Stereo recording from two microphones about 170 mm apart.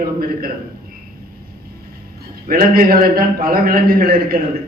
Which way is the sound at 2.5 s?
60° right (ahead or behind).